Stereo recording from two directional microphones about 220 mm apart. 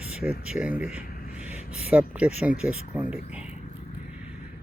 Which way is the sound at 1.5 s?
30° left (ahead or behind).